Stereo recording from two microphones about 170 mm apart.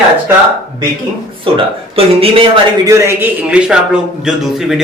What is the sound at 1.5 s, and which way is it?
Speech, 35° right (ahead or behind).